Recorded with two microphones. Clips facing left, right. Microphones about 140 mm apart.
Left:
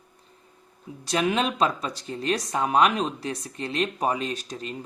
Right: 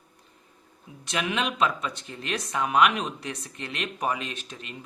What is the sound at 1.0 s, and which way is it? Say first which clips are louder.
Speech: left 4 dB; 35° left (ahead or behind).